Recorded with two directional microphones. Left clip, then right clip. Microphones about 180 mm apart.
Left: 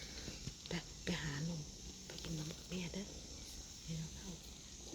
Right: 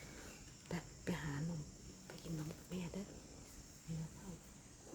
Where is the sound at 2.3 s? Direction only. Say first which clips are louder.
Even; 5° right (ahead or behind).